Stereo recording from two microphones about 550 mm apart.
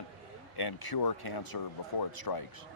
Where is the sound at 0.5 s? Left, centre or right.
Left.